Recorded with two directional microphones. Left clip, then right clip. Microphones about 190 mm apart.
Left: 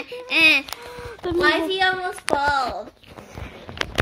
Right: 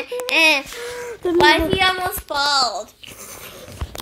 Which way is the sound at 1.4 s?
35° left (ahead or behind).